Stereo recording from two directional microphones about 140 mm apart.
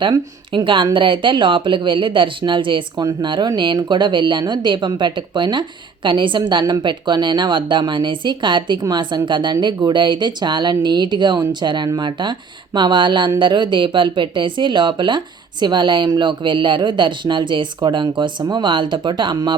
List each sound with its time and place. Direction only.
0.0 s speech: 35° right (ahead or behind)